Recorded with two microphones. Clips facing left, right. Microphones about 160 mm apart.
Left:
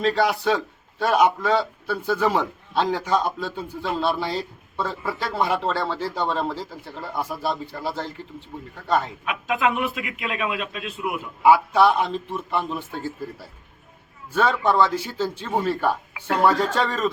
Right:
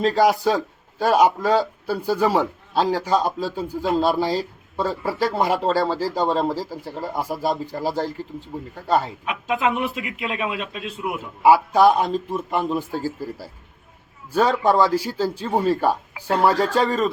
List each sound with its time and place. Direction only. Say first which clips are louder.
0.0 s a man's voice: right 3 dB; 40° right (ahead or behind)